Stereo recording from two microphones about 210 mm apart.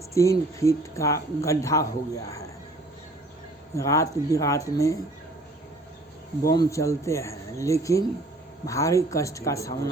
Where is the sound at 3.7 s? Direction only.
15° left (ahead or behind).